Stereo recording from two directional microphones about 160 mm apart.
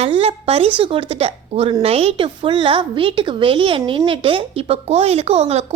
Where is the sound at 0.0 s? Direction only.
40° right (ahead or behind).